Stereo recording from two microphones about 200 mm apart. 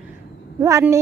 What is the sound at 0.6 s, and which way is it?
Speech, 15° right (ahead or behind).